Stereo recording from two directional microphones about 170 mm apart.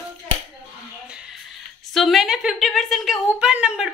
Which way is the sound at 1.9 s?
Centre (ahead or behind).